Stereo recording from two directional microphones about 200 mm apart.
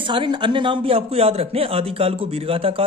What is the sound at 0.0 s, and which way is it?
Speech, 25° right (ahead or behind).